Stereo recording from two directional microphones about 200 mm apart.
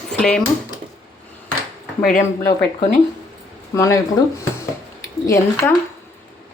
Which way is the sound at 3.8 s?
15° left (ahead or behind).